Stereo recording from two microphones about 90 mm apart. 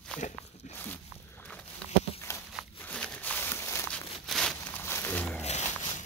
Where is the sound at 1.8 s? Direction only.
10° left (ahead or behind).